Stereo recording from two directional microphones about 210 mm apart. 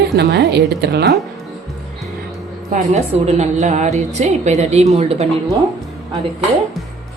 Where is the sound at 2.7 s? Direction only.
30° right (ahead or behind).